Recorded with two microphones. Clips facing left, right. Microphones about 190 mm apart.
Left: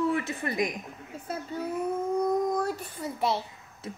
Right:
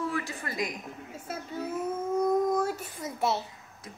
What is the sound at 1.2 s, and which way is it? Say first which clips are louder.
Speech: left 2 dB; 5° right (ahead or behind).